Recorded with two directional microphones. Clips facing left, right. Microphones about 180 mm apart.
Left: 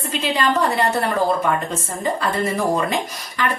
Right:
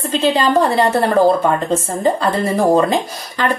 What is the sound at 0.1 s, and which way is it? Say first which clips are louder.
A woman's voice: right 6 dB; 30° right (ahead or behind).